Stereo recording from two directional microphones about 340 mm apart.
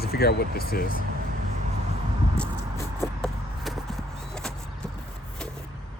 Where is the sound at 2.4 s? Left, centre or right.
Centre.